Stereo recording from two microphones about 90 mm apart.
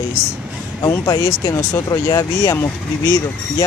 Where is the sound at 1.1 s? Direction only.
40° left (ahead or behind).